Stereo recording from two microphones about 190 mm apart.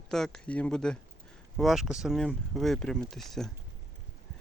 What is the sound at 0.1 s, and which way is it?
Speech, 5° left (ahead or behind).